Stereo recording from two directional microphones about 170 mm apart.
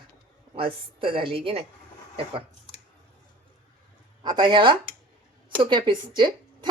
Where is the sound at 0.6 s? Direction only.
30° right (ahead or behind).